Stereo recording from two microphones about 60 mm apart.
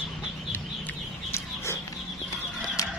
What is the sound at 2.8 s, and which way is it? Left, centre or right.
Music, left.